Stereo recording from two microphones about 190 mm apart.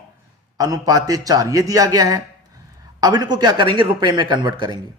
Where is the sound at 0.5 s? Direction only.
20° right (ahead or behind).